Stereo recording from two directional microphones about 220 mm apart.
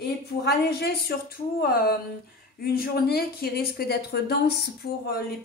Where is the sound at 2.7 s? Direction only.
45° left (ahead or behind).